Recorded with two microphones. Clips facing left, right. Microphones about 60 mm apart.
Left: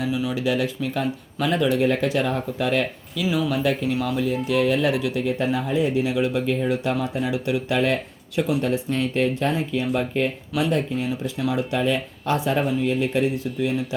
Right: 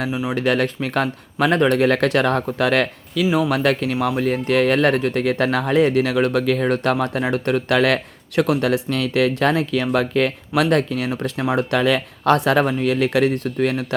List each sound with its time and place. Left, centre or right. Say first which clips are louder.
0.3 s speech: right 4 dB; right
5.2 s speech: right 4 dB; right
8.6 s speech: right 3 dB; right
11.1 s speech: right 3 dB; right